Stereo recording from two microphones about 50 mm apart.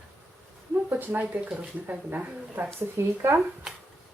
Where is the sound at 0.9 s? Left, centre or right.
Right.